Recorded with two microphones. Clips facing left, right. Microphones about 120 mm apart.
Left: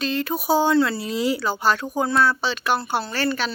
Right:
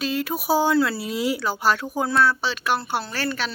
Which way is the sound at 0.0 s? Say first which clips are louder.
Left 1 dB; 5° right (ahead or behind).